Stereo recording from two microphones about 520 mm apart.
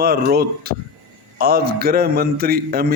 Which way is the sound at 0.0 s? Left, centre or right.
Centre.